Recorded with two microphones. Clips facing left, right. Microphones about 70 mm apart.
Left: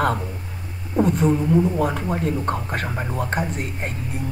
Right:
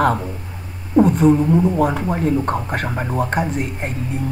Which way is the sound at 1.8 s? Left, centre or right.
Centre.